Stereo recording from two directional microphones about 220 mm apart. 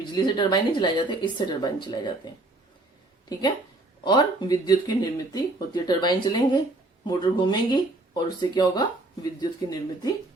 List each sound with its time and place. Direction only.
0.0 s speech: 20° left (ahead or behind)
4.0 s speech: 20° left (ahead or behind)